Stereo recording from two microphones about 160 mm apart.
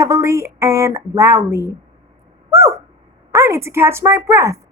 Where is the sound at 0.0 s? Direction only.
15° right (ahead or behind).